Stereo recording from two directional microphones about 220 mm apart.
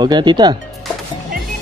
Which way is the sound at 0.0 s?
20° right (ahead or behind).